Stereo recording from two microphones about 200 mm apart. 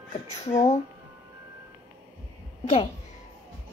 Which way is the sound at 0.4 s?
35° left (ahead or behind).